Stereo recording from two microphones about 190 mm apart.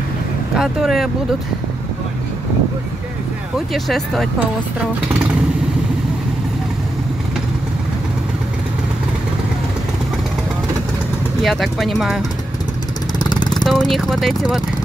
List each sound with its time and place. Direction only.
0.6 s speech: centre (ahead or behind)
3.5 s speech: centre (ahead or behind)
11.4 s speech: centre (ahead or behind)
13.2 s vehicle: 25° left (ahead or behind)
13.7 s speech: centre (ahead or behind)